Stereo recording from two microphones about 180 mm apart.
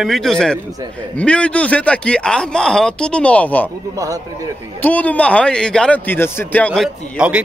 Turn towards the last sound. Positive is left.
turn(degrees=-5)  # may be behind; listen again after turning